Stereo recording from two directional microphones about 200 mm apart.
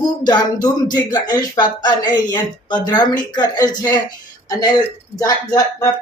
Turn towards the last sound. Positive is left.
turn(degrees=15)  # may be behind; listen again after turning